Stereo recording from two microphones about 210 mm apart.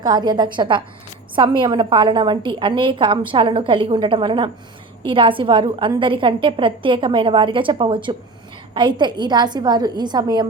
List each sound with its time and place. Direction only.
0.0 s a woman's voice: 20° right (ahead or behind)